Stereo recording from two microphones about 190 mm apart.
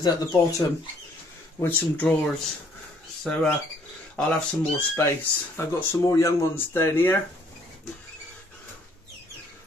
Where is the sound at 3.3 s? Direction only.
5° left (ahead or behind).